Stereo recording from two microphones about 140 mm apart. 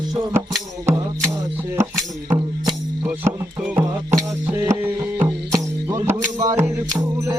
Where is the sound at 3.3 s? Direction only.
15° right (ahead or behind).